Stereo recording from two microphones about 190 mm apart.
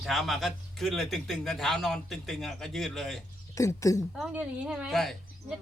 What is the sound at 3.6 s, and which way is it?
Speech, 15° left (ahead or behind).